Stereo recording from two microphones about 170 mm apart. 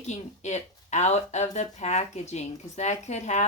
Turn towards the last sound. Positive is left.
turn(degrees=40)  # may be behind; listen again after turning